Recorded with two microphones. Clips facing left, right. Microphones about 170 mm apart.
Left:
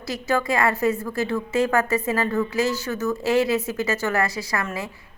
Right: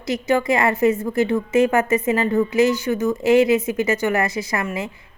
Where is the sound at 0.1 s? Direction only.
20° right (ahead or behind).